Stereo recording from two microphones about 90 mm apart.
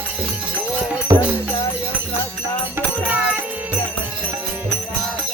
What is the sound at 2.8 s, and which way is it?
Music, 25° right (ahead or behind).